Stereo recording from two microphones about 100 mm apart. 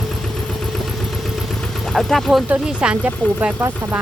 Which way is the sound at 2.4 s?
10° right (ahead or behind).